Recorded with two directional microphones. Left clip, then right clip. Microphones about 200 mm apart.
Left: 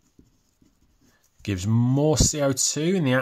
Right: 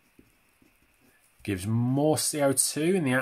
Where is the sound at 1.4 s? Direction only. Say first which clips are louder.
Left 4 dB; 25° left (ahead or behind).